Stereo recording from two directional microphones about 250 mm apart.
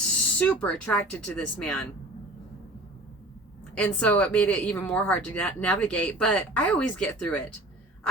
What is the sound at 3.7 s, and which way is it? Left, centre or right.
Speech, centre.